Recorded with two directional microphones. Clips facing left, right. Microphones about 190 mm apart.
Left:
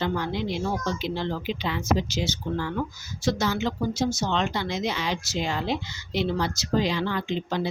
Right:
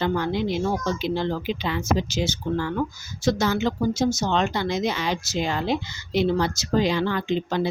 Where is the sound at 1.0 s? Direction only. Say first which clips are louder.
Right 4 dB; 50° right (ahead or behind).